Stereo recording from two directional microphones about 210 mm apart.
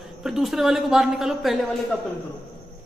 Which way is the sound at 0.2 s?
Centre (ahead or behind).